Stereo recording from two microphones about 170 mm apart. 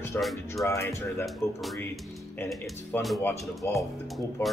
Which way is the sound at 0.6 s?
15° left (ahead or behind).